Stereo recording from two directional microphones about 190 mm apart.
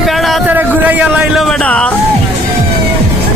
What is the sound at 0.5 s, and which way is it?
Music, 10° right (ahead or behind).